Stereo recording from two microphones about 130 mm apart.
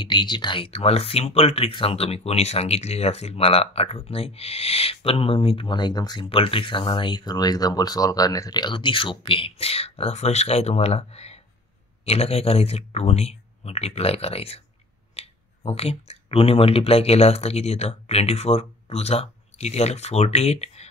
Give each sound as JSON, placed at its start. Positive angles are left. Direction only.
{"t": 0.0, "sound": "speech", "side_deg": 35}
{"t": 6.2, "sound": "speech", "side_deg": 45}